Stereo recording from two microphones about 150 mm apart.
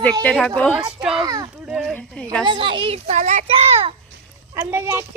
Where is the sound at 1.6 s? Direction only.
5° right (ahead or behind).